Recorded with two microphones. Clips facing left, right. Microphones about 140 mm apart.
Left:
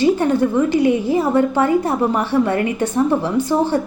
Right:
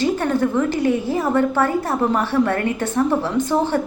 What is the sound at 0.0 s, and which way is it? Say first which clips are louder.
A woman's voice: left 4 dB; 15° left (ahead or behind).